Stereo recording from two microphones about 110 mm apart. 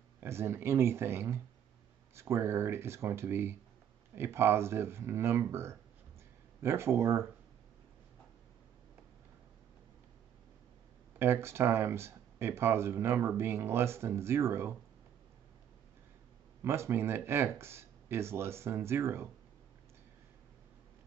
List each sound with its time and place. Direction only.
0.2 s speech: 25° right (ahead or behind)
11.1 s speech: 25° right (ahead or behind)
16.6 s speech: 25° right (ahead or behind)